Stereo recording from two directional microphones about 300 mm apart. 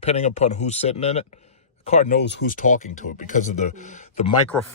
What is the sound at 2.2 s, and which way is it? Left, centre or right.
Speech, left.